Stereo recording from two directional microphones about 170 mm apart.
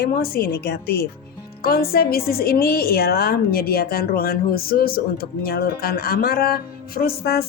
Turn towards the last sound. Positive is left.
turn(degrees=70)  # may be behind; listen again after turning